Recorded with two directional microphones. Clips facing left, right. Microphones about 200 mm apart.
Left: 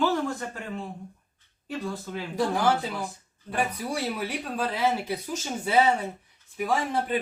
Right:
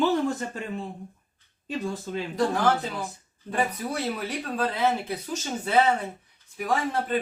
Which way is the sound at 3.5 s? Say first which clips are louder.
Right 1 dB; 10° left (ahead or behind).